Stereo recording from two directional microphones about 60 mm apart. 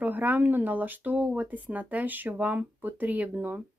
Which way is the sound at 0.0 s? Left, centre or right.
Right.